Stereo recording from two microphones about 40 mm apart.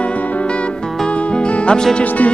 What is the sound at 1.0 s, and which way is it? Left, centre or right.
Music, left.